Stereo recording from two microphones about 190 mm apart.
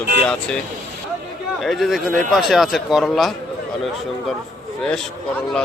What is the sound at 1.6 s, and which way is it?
Speech, centre (ahead or behind).